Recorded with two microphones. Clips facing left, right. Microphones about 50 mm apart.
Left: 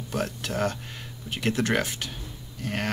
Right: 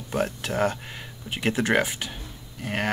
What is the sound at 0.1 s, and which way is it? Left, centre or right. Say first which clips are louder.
Speech: right 3 dB; centre.